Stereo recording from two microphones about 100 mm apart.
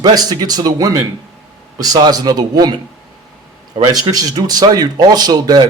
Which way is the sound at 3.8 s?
35° right (ahead or behind).